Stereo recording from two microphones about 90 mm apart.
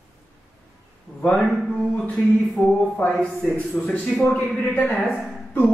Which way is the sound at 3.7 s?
20° left (ahead or behind).